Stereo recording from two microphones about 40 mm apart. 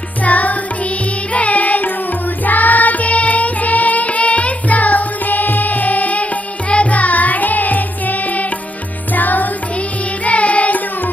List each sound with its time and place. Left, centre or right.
0.2 s music: left
9.8 s music: left